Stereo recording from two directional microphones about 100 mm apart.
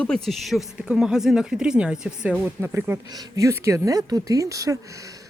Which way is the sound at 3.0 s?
40° right (ahead or behind).